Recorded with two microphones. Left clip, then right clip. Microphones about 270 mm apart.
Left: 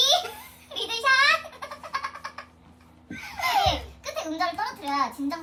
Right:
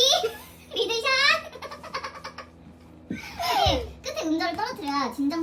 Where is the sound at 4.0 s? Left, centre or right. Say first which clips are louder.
Right 1 dB; centre.